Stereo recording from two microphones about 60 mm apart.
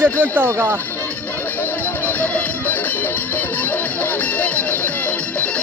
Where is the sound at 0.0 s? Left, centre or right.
Right.